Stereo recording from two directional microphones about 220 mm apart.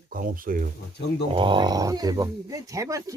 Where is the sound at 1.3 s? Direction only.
20° right (ahead or behind).